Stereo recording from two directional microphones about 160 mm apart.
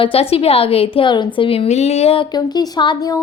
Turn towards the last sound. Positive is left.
turn(degrees=25)  # may be behind; listen again after turning